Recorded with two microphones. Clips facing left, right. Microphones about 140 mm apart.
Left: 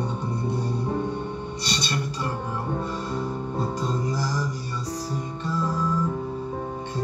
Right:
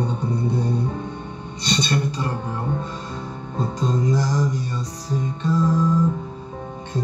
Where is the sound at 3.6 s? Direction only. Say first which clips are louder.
Right 5 dB; 20° right (ahead or behind).